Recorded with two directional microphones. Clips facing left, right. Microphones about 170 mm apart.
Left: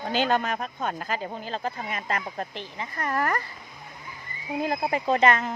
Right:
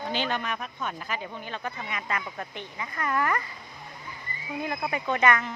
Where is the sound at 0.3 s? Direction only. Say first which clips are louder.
Left 6 dB; 40° left (ahead or behind).